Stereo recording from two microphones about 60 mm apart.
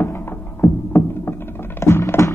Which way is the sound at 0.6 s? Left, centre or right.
Left.